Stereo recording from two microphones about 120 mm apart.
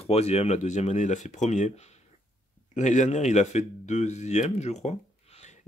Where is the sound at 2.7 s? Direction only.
85° left; by 4.7 s 70° left (ahead or behind).